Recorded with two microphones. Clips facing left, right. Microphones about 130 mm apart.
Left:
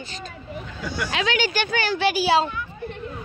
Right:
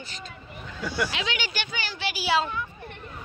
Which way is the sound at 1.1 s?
45° left (ahead or behind).